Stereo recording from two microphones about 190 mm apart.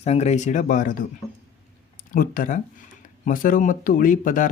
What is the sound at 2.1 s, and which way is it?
Speech, 45° left (ahead or behind).